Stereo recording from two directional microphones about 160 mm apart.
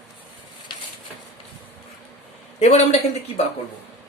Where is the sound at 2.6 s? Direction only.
45° left (ahead or behind).